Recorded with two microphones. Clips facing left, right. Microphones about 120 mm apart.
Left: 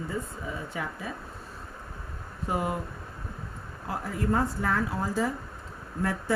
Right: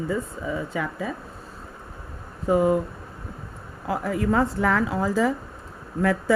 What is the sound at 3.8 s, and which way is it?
A woman's voice, 90° right.